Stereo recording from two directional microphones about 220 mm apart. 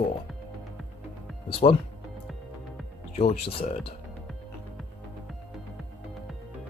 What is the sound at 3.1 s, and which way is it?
Speech, 30° left (ahead or behind).